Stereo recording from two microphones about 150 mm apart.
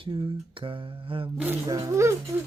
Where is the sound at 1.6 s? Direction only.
25° right (ahead or behind).